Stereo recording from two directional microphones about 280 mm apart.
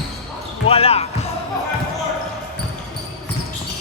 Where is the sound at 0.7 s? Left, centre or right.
Left.